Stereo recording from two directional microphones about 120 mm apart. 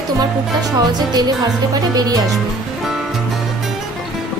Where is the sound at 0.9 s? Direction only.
35° right (ahead or behind).